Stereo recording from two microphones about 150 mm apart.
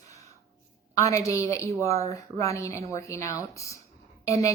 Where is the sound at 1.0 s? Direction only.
20° left (ahead or behind).